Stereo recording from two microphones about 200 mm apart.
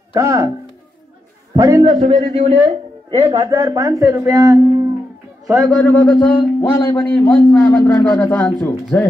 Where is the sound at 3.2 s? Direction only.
15° right (ahead or behind).